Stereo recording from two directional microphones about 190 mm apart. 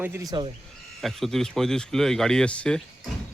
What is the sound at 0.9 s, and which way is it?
Speech, centre (ahead or behind).